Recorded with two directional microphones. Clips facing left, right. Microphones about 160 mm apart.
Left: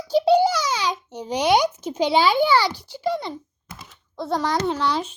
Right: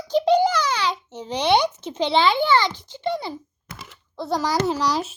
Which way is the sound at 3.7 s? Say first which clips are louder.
Right 2 dB; 75° right (ahead or behind).